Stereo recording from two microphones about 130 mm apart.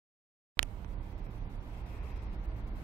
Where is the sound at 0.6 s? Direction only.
15° left (ahead or behind).